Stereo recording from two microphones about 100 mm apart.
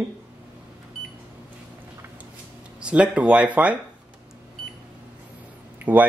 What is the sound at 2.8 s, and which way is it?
Speech, 10° right (ahead or behind).